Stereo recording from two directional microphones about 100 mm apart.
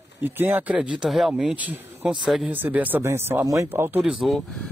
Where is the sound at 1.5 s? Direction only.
15° right (ahead or behind).